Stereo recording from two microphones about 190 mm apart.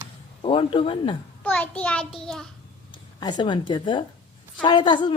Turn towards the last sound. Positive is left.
turn(degrees=25)  # may be behind; listen again after turning